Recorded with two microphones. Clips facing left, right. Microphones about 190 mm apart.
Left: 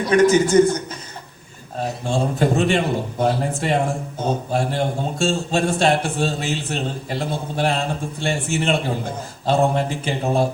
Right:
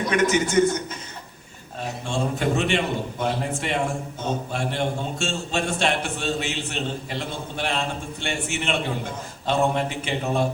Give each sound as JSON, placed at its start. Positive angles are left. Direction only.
{"t": 0.0, "sound": "a man's voice", "side_deg": 35}
{"t": 1.8, "sound": "a man's voice", "side_deg": 35}